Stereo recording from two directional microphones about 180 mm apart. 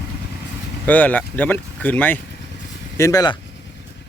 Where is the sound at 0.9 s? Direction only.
10° left (ahead or behind).